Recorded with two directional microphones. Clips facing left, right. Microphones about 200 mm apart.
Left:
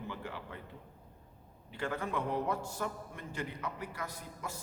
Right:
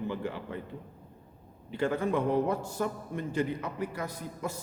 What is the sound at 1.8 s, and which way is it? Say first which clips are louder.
A man's voice: right 8 dB; 25° right (ahead or behind).